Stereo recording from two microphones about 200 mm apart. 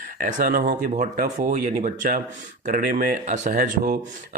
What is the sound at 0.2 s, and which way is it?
Speech, 40° right (ahead or behind).